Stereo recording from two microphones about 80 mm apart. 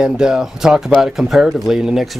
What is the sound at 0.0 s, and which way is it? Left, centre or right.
Speech, centre.